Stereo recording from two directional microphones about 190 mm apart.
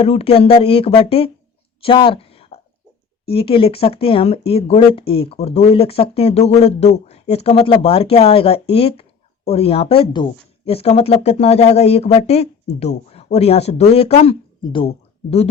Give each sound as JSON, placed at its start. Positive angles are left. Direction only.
{"t": 0.0, "sound": "speech", "side_deg": 30}
{"t": 1.8, "sound": "a sound", "side_deg": 25}
{"t": 3.2, "sound": "speech", "side_deg": 30}